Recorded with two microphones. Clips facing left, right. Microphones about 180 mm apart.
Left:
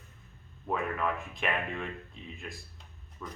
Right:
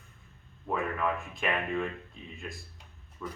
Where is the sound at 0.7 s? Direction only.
Centre (ahead or behind).